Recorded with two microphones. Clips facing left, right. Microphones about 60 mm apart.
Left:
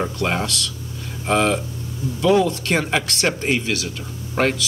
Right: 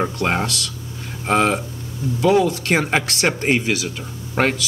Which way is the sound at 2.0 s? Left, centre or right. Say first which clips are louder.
Right 3 dB; right.